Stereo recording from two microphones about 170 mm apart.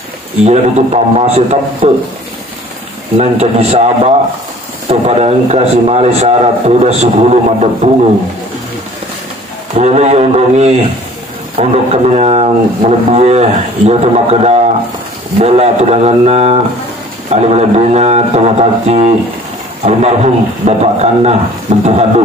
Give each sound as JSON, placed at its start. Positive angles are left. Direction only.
{"t": 0.5, "sound": "speech", "side_deg": -40}
{"t": 3.2, "sound": "speech", "side_deg": -35}
{"t": 9.8, "sound": "speech", "side_deg": -40}